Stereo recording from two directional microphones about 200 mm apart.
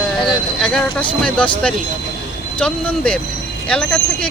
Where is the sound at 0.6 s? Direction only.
5° left (ahead or behind).